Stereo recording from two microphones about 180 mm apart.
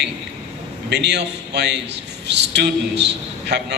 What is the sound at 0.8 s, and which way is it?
A man's voice, 70° right (ahead or behind).